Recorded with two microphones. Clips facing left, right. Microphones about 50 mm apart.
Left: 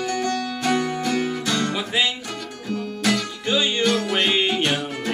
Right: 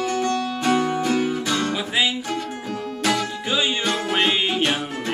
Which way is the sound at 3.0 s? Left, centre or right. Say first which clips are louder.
Even; centre.